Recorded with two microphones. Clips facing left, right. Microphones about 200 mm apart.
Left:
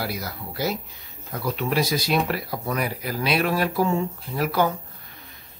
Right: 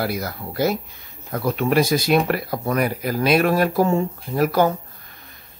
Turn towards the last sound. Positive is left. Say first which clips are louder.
# right 5 dB
turn(degrees=-45)  # may be behind; listen again after turning